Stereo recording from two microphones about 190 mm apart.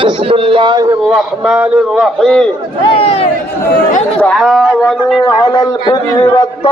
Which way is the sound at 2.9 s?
30° left (ahead or behind).